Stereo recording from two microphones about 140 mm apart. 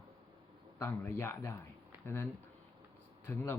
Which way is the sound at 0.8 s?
20° left (ahead or behind).